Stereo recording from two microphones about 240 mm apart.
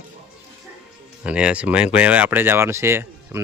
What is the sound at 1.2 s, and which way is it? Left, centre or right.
Speech, centre.